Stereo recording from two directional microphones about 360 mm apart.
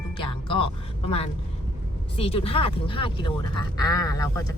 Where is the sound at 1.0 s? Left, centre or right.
Centre.